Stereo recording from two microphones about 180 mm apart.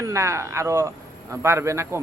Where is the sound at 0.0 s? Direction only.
15° right (ahead or behind).